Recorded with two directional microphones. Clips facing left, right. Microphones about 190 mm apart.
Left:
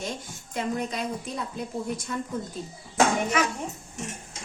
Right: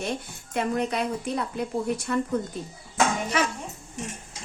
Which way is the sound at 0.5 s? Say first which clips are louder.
Right 3 dB; 65° right (ahead or behind).